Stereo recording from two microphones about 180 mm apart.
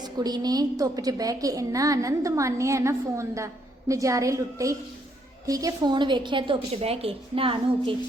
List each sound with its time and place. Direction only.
0.0 s a woman's voice: 20° right (ahead or behind)